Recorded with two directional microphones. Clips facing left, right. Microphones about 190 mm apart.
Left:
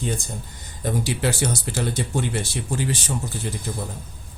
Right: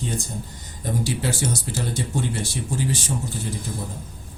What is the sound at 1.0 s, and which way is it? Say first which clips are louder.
Speech: even; 60° left (ahead or behind).